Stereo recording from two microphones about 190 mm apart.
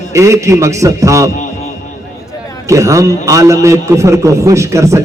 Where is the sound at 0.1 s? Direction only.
15° right (ahead or behind).